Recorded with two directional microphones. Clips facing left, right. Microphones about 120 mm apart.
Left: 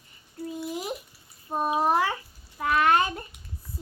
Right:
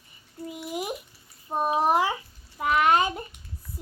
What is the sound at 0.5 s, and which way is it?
A child's voice, 15° right (ahead or behind).